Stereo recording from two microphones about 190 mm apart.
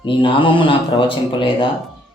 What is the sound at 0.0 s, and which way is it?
A man's voice, 25° left (ahead or behind).